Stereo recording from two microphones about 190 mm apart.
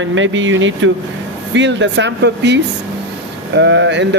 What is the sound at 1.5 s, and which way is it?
Speech, 70° right (ahead or behind).